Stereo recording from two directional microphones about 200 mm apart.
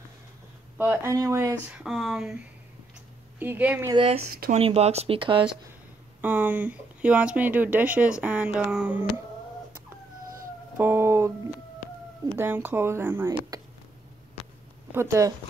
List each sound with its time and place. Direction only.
0.7 s speech: 15° right (ahead or behind)
1.8 s speech: centre (ahead or behind)
3.3 s speech: 10° right (ahead or behind)
3.9 s speech: 25° right (ahead or behind)
6.2 s speech: 10° right (ahead or behind)
10.8 s speech: 10° right (ahead or behind)
12.4 s speech: 10° right (ahead or behind)
14.9 s speech: 15° right (ahead or behind)